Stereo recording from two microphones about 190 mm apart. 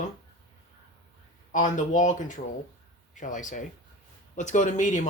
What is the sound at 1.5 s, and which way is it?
Speech, 40° left (ahead or behind).